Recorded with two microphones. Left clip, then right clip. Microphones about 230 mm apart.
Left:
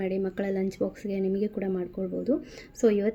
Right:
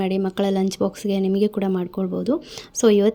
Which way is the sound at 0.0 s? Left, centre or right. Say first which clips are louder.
Right 7 dB; right.